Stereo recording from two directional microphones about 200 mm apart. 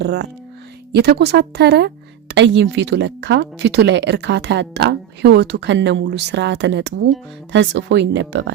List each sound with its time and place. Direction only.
0.0 s speech: 60° right (ahead or behind)